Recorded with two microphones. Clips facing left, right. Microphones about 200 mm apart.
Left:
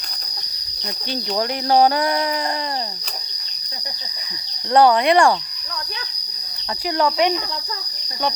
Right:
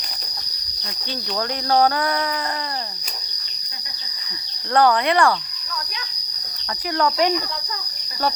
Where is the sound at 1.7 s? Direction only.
20° left (ahead or behind).